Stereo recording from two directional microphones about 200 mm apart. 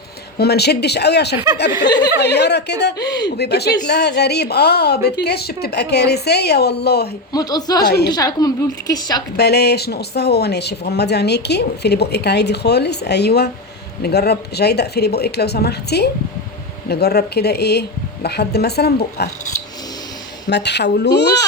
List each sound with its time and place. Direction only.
0.3 s speech: 55° left (ahead or behind)
1.8 s a woman's voice: 20° left (ahead or behind)
2.1 s speech: 55° left (ahead or behind)
7.3 s a woman's voice: 20° left (ahead or behind)
7.9 s a woman's voice: 55° left (ahead or behind)
8.1 s a woman's voice: 20° left (ahead or behind)
9.4 s a woman's voice: 55° left (ahead or behind)
20.5 s speech: 60° left (ahead or behind)